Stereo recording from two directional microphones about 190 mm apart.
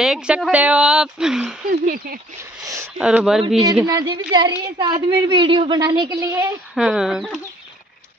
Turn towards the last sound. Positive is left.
turn(degrees=0)  # may be behind; listen again after turning